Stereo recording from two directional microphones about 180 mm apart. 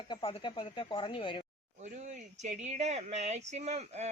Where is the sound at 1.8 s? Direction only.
40° right (ahead or behind).